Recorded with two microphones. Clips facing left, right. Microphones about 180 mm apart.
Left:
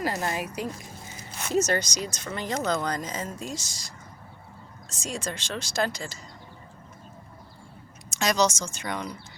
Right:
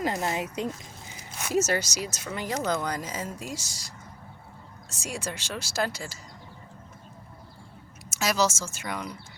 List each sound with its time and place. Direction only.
0.0 s speech: 20° right (ahead or behind)
1.5 s speech: 5° right (ahead or behind)
8.1 s speech: 5° right (ahead or behind)